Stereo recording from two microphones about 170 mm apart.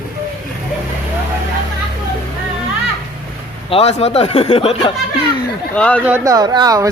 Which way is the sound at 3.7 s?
35° left (ahead or behind).